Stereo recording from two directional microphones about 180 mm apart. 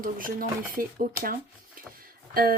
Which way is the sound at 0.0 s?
50° right (ahead or behind).